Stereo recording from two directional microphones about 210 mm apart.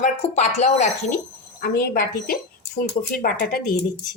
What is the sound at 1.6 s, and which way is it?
A woman's voice, 45° left (ahead or behind).